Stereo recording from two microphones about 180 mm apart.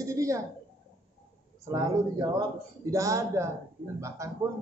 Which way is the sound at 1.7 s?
20° right (ahead or behind).